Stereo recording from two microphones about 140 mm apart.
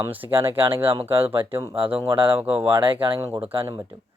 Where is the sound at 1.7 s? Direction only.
40° right (ahead or behind).